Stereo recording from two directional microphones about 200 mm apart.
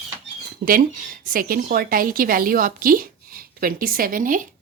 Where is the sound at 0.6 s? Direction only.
55° right (ahead or behind).